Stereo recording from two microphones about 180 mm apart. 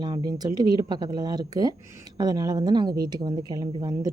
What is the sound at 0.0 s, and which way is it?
Speech, 25° right (ahead or behind).